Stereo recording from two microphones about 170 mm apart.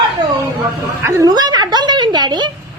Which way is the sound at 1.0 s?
20° right (ahead or behind).